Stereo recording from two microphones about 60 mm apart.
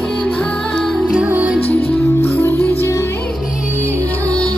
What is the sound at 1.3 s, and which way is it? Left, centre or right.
Music, right.